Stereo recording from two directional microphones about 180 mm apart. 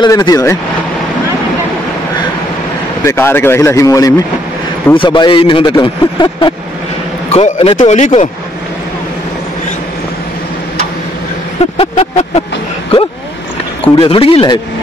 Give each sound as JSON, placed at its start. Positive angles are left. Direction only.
{"t": 0.0, "sound": "speech", "side_deg": 20}
{"t": 3.0, "sound": "speech", "side_deg": 15}
{"t": 7.2, "sound": "a man's voice", "side_deg": 35}
{"t": 11.7, "sound": "a man's voice", "side_deg": 35}
{"t": 13.9, "sound": "a man's voice", "side_deg": 30}